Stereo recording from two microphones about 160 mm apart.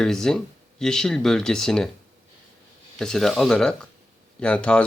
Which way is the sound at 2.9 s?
5° left (ahead or behind).